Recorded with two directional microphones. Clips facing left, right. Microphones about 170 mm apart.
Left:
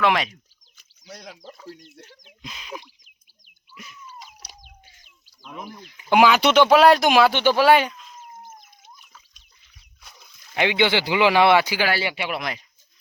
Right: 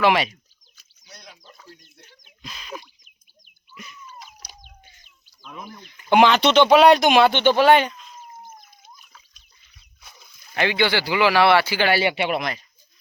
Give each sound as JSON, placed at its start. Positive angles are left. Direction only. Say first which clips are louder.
{"t": 0.0, "sound": "speech", "louder": "right 2 dB", "side_deg": -5}
{"t": 1.0, "sound": "speech", "louder": "left 7 dB", "side_deg": 90}
{"t": 2.4, "sound": "speech", "louder": "even", "side_deg": 15}
{"t": 3.8, "sound": "a sound", "louder": "right 1 dB", "side_deg": 5}
{"t": 5.5, "sound": "speech", "louder": "left 2 dB", "side_deg": 10}
{"t": 10.0, "sound": "a sound", "louder": "even", "side_deg": -5}
{"t": 10.5, "sound": "speech", "louder": "left 1 dB", "side_deg": 15}
{"t": 12.1, "sound": "speech", "louder": "right 5 dB", "side_deg": -30}